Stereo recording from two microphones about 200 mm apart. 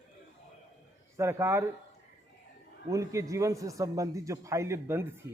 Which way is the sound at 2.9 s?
15° right (ahead or behind).